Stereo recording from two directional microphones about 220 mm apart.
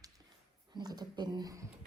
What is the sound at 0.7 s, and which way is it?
Speech, 20° right (ahead or behind).